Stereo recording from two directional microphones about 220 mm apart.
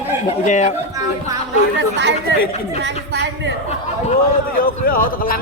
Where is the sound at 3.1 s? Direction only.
50° right (ahead or behind).